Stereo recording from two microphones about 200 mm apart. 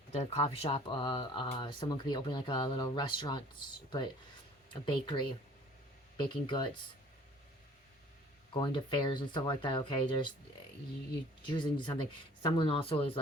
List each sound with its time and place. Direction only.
0.1 s speech: 30° left (ahead or behind)
4.7 s speech: 25° left (ahead or behind)
8.5 s speech: 20° left (ahead or behind)
11.4 s speech: 20° left (ahead or behind)